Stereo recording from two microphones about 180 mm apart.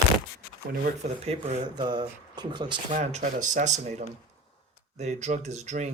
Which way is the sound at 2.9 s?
40° right (ahead or behind).